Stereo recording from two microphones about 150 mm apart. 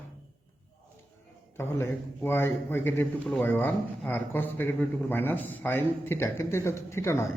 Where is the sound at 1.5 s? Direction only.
15° left (ahead or behind).